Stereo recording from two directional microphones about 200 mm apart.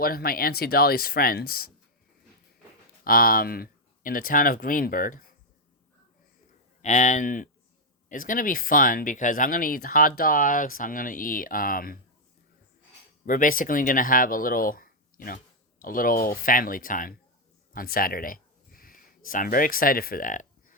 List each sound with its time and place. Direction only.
0.0 s speech: 50° left (ahead or behind)
3.0 s speech: 45° left (ahead or behind)
6.8 s speech: 35° left (ahead or behind)
13.2 s speech: 45° left (ahead or behind)